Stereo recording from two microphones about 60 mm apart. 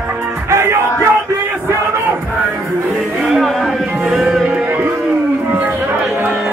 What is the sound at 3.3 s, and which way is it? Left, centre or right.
Music, centre.